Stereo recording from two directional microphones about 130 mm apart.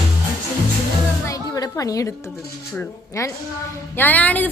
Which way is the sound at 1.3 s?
25° left (ahead or behind).